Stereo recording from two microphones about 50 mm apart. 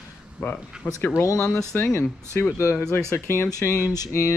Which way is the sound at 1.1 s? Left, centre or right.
Left.